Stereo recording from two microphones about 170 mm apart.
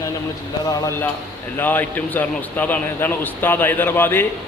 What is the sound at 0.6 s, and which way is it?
A man's voice, 20° left (ahead or behind).